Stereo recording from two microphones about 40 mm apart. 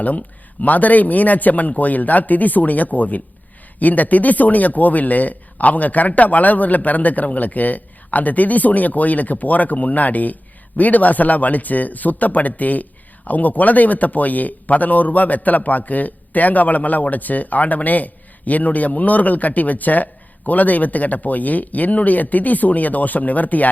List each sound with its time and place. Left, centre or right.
0.0 s speech: left